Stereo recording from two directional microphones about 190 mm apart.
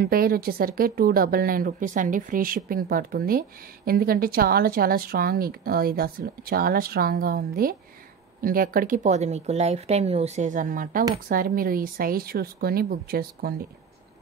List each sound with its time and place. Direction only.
0.0 s a woman's voice: 50° right (ahead or behind)